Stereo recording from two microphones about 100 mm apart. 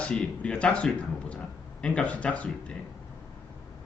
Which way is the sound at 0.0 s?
10° left (ahead or behind).